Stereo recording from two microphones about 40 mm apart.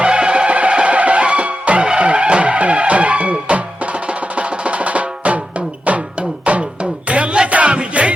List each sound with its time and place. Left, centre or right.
0.0 s music: right
4.4 s percussion: right
6.4 s music: right